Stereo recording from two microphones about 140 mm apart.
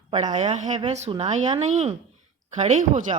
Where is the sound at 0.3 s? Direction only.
50° right (ahead or behind).